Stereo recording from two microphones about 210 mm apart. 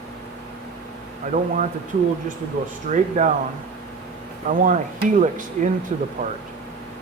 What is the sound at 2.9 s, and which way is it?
Speech, 35° right (ahead or behind).